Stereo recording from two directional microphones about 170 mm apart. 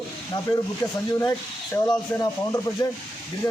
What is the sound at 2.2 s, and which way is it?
Speech, 20° left (ahead or behind).